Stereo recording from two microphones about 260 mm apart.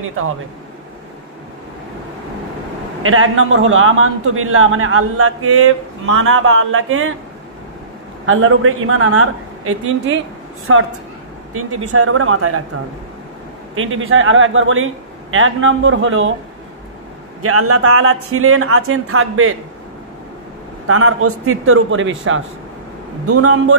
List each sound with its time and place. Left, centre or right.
3.0 s a man's voice: right
8.3 s a man's voice: right
13.7 s a man's voice: right
17.4 s speech: right
20.8 s a man's voice: right